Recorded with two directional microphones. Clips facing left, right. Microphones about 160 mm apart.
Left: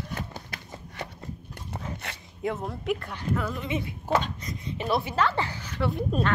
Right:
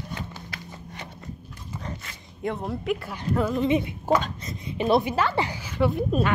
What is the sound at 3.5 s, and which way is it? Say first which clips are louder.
A woman's voice: right 8 dB; 20° right (ahead or behind).